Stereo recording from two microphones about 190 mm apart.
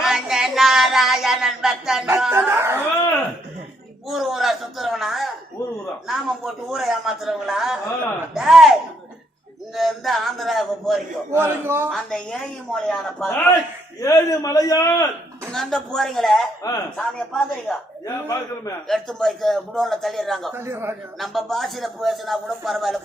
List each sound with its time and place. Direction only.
0.0 s a sound: centre (ahead or behind)
4.1 s a sound: centre (ahead or behind)
6.1 s speech: centre (ahead or behind)
11.3 s a man's voice: 10° right (ahead or behind)
11.9 s speech: centre (ahead or behind)
14.0 s a man's voice: 15° left (ahead or behind)
15.5 s speech: centre (ahead or behind)
18.0 s a man's voice: 15° left (ahead or behind)
18.9 s speech: centre (ahead or behind)
20.5 s a man's voice: 10° right (ahead or behind)
21.2 s speech: centre (ahead or behind)